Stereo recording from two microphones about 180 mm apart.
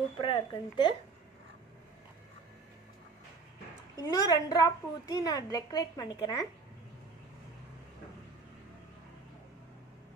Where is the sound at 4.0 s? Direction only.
20° left (ahead or behind).